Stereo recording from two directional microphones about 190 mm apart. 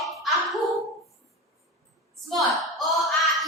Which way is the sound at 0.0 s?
Centre (ahead or behind).